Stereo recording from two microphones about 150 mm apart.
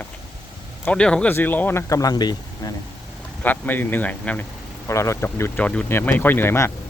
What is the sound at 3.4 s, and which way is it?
Speech, 10° left (ahead or behind).